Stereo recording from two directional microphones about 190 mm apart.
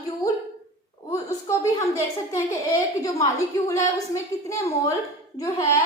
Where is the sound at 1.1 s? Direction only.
15° left (ahead or behind).